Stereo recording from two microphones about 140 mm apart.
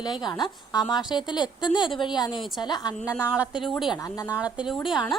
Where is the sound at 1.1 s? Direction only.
30° left (ahead or behind).